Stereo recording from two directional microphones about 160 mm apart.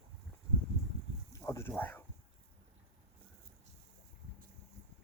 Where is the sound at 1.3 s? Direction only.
20° left (ahead or behind).